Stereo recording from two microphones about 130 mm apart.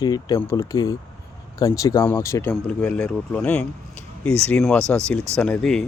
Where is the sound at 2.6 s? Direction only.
10° left (ahead or behind).